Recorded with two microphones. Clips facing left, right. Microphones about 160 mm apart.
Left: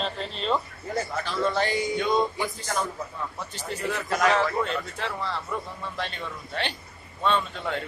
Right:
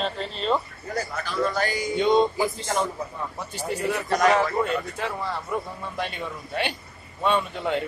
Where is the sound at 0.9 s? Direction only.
25° left (ahead or behind).